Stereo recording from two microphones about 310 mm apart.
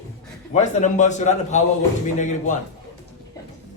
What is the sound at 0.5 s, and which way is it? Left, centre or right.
A man's voice, left.